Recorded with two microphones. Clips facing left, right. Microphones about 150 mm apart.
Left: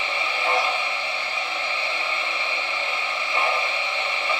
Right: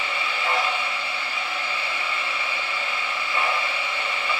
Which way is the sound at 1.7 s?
20° left (ahead or behind).